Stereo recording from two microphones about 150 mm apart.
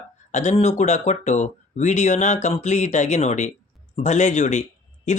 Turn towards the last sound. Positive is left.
turn(degrees=50)  # may be behind; listen again after turning